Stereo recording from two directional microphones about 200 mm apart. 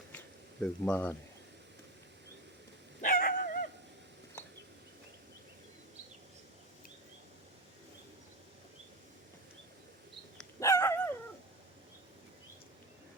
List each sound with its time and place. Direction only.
0.6 s speech: 5° left (ahead or behind)
3.0 s dog: 40° left (ahead or behind)
4.4 s bird: 10° left (ahead or behind)
10.6 s dog: 15° left (ahead or behind)